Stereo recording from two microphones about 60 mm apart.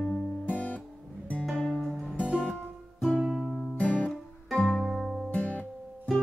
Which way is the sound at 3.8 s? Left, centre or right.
Left.